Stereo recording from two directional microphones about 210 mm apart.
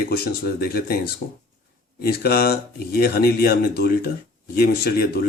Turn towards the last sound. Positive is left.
turn(degrees=45)  # may be behind; listen again after turning